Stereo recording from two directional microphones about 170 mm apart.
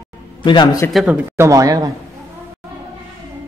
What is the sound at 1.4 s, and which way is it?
Speech, 20° right (ahead or behind).